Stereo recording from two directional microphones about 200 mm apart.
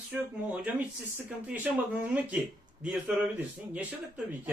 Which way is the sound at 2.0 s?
5° right (ahead or behind).